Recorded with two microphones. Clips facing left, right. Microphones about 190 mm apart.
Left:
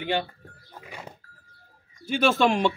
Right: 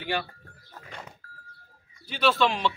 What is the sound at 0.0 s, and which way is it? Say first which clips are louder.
Speech: left 3 dB; 20° left (ahead or behind).